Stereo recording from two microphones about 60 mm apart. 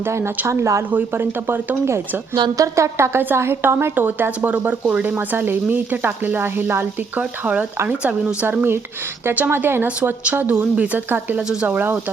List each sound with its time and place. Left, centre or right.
0.0 s a woman's voice: right
0.9 s speech: right
2.6 s a woman's voice: right
5.0 s speech: right
7.2 s a woman's voice: right
8.4 s speech: right
9.8 s a woman's voice: right